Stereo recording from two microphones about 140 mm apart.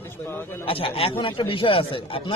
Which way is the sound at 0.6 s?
40° left (ahead or behind).